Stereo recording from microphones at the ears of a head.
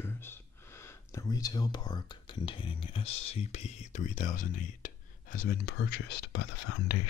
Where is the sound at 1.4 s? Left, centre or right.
Left.